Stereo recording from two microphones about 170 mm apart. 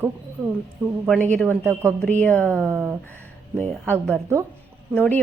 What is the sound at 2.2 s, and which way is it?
Speech, 10° left (ahead or behind).